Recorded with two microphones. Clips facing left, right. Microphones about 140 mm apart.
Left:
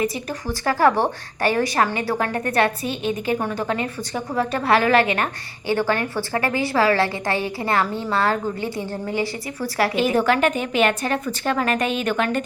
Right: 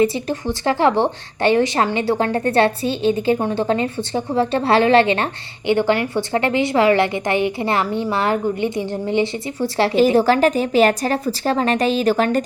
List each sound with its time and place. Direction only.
0.0 s speech: 25° right (ahead or behind)